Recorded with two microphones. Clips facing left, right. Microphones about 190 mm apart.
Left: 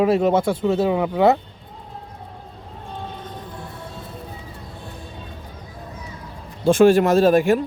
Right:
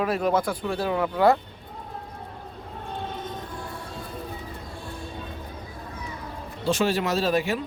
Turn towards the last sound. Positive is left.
turn(degrees=50)  # may be behind; listen again after turning